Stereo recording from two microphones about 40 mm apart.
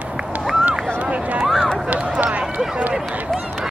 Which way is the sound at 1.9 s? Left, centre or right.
Right.